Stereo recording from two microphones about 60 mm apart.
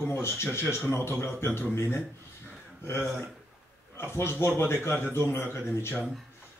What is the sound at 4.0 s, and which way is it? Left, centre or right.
A man's voice, left.